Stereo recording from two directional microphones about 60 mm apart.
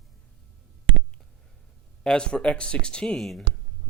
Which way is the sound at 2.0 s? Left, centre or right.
Centre.